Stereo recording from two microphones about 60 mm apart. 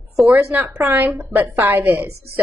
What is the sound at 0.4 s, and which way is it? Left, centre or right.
A woman's voice, right.